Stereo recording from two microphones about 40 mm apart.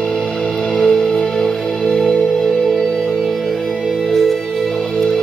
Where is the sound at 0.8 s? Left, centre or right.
Centre.